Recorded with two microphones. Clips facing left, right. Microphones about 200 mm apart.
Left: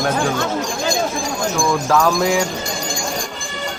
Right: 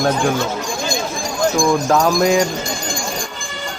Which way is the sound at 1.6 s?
20° right (ahead or behind).